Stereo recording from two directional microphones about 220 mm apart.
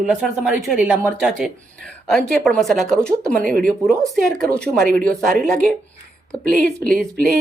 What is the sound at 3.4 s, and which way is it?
Speech, 40° right (ahead or behind).